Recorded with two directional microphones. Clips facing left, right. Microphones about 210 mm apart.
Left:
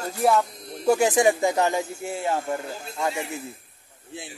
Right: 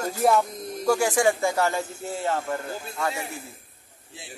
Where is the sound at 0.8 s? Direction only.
20° left (ahead or behind).